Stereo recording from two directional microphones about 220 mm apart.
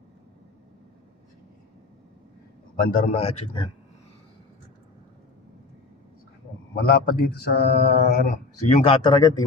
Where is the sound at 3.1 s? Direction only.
30° left (ahead or behind).